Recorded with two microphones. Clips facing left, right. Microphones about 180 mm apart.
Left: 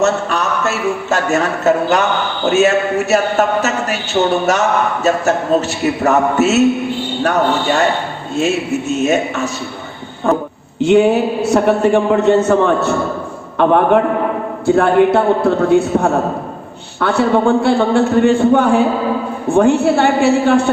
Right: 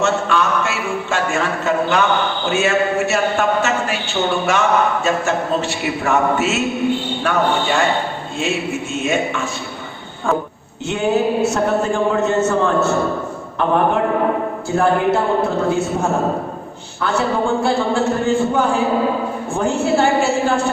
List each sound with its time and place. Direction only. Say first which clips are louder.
0.0 s a man's voice: left 2 dB; 40° left (ahead or behind)
10.8 s a man's voice: left 6 dB; 70° left (ahead or behind)
14.8 s a man's voice: left 4 dB; 65° left (ahead or behind)